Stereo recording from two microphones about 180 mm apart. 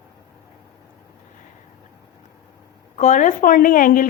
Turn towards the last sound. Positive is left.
turn(degrees=50)  # may be behind; listen again after turning